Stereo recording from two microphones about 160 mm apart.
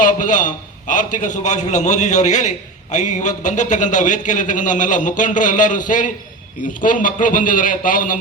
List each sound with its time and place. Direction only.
0.0 s a man's voice: 55° left (ahead or behind)